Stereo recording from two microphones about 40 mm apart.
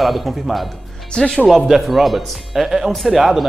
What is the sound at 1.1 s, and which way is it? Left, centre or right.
Speech, centre.